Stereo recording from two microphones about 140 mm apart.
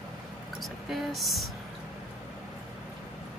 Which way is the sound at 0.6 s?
Centre (ahead or behind).